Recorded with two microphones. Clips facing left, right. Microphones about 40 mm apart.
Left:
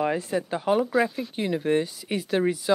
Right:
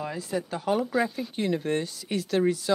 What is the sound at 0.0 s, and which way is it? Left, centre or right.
Speech, left.